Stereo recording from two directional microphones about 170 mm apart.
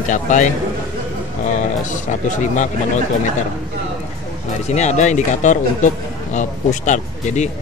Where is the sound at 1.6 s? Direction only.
45° left (ahead or behind).